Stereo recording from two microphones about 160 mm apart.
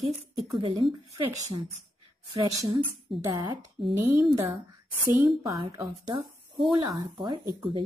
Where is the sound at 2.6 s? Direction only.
25° right (ahead or behind).